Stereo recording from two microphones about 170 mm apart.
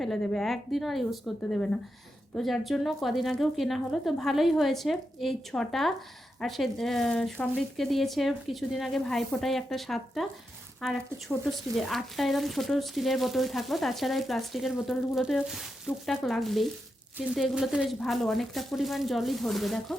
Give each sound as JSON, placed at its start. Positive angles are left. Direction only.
{"t": 0.0, "sound": "speech", "side_deg": 0}